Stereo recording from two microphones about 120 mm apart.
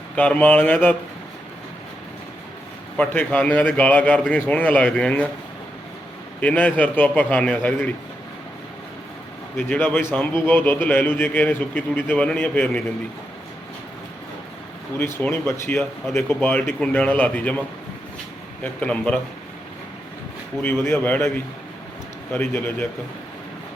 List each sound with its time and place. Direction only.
0.2 s a man's voice: 15° left (ahead or behind)
3.0 s a man's voice: 15° left (ahead or behind)
6.4 s a man's voice: 10° left (ahead or behind)
9.6 s a man's voice: 15° left (ahead or behind)
14.9 s a man's voice: 20° left (ahead or behind)
18.6 s a man's voice: 10° left (ahead or behind)
20.6 s a man's voice: 15° left (ahead or behind)